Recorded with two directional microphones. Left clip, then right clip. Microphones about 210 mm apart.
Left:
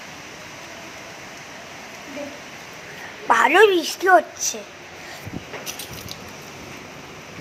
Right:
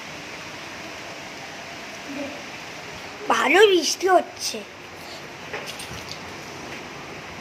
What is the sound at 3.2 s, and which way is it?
Speech, 5° right (ahead or behind).